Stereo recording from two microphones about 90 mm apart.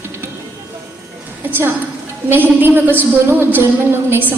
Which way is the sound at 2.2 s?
25° right (ahead or behind).